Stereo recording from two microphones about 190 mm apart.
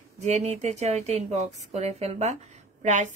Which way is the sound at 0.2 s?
35° right (ahead or behind).